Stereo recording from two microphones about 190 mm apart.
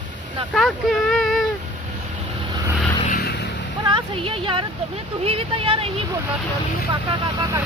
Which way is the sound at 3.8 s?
25° right (ahead or behind).